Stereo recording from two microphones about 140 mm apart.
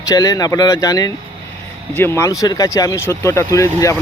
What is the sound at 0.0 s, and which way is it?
Speech, 25° left (ahead or behind).